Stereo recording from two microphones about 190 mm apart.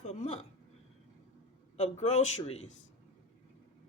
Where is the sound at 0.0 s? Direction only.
35° left (ahead or behind).